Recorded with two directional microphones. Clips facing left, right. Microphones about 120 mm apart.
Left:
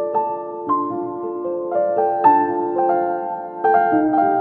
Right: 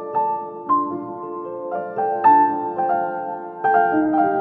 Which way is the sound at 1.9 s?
10° left (ahead or behind).